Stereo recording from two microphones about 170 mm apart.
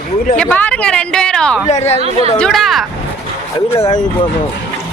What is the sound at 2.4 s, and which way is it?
Speech, centre (ahead or behind).